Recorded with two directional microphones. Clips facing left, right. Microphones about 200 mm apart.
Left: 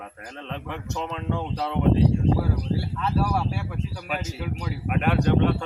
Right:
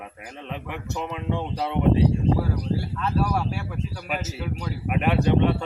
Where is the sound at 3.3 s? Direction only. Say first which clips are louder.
Even; centre (ahead or behind).